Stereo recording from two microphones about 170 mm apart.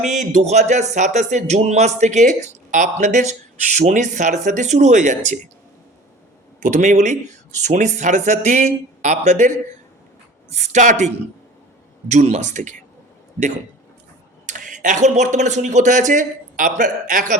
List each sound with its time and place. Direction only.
0.0 s speech: 45° right (ahead or behind)
6.6 s speech: 45° right (ahead or behind)
10.5 s speech: 45° right (ahead or behind)
14.4 s speech: 50° right (ahead or behind)